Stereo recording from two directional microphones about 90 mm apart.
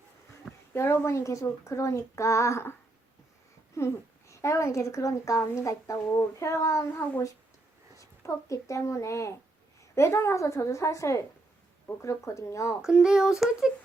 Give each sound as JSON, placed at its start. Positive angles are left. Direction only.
{"t": 0.7, "sound": "a child's voice", "side_deg": 30}
{"t": 3.8, "sound": "a child's voice", "side_deg": 30}
{"t": 7.9, "sound": "a child's voice", "side_deg": 35}
{"t": 12.8, "sound": "speech", "side_deg": -5}